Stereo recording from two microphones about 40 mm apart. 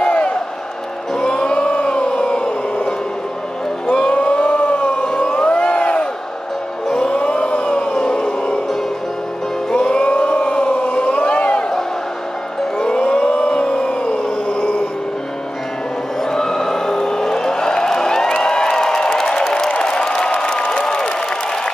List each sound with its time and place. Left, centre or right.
0.0 s music: left
1.2 s a sound: left
5.0 s crowd: centre
6.9 s a sound: centre
9.7 s music: centre
10.0 s a sound: left
12.7 s siren: centre
16.3 s music: centre
19.7 s applause: left